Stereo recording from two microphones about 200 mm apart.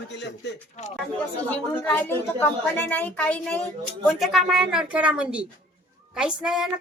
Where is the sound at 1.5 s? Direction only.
5° left (ahead or behind).